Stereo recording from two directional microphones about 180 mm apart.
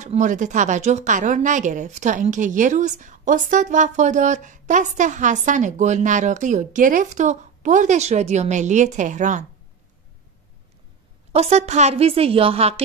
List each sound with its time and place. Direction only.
0.0 s speech: 40° right (ahead or behind)
11.3 s a woman's voice: 35° right (ahead or behind)